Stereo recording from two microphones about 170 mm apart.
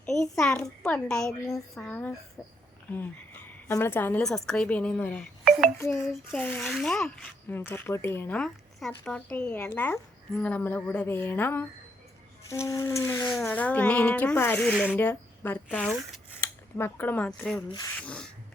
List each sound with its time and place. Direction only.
0.0 s a child's voice: 5° left (ahead or behind)
1.3 s a sound: 20° left (ahead or behind)
1.7 s a child's voice: 5° left (ahead or behind)
14.9 s a child's voice: 10° left (ahead or behind)